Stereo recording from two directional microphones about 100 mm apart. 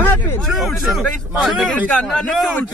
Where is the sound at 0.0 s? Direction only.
20° left (ahead or behind).